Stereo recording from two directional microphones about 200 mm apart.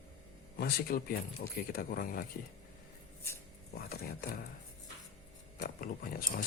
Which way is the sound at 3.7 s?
50° left (ahead or behind).